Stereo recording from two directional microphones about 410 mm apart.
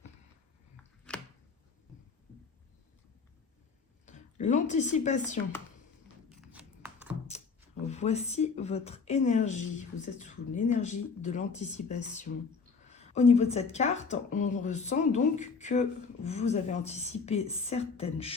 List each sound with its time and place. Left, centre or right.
1.1 s chopping: centre
4.0 s speech: centre
6.2 s a sound: centre
7.9 s speech: centre